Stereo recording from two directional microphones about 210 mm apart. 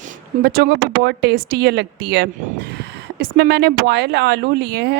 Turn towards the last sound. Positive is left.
turn(degrees=-50)  # may be behind; listen again after turning